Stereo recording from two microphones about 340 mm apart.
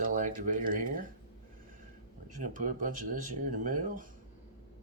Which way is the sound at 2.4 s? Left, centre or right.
Right.